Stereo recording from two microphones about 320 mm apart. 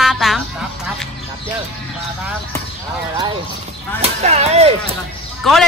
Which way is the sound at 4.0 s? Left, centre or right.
Centre.